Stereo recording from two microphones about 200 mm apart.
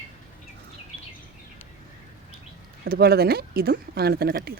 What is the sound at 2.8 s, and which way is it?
Speech, 50° right (ahead or behind).